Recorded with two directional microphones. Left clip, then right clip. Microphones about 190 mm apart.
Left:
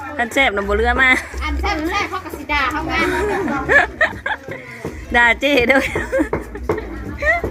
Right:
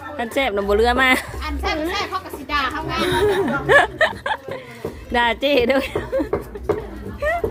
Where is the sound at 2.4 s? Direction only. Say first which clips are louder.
Left 4 dB; 35° right (ahead or behind).